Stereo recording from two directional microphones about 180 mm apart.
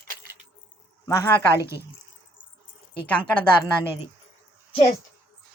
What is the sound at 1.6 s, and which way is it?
Speech, 15° right (ahead or behind).